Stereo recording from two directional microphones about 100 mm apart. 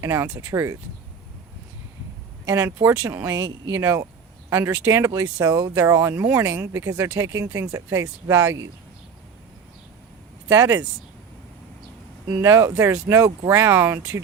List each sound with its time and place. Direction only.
0.0 s speech: 30° right (ahead or behind)
2.5 s speech: 35° right (ahead or behind)
4.4 s speech: 25° right (ahead or behind)
10.5 s speech: 30° right (ahead or behind)
12.4 s speech: 30° right (ahead or behind)